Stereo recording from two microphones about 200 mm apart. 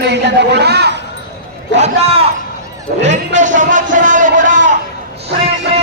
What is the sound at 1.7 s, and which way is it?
A man's voice, 30° right (ahead or behind).